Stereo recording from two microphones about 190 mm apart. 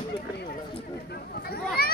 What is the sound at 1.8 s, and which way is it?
Speech, 50° left (ahead or behind).